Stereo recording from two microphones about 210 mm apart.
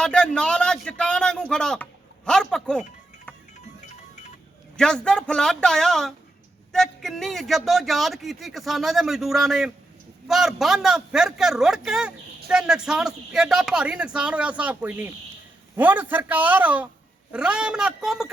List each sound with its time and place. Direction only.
0.0 s a man's voice: 5° left (ahead or behind)
3.8 s music: 35° left (ahead or behind)
4.8 s a man's voice: 5° left (ahead or behind)